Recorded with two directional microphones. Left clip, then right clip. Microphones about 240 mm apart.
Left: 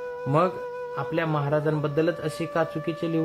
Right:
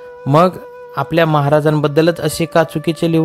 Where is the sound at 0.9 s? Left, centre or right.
Right.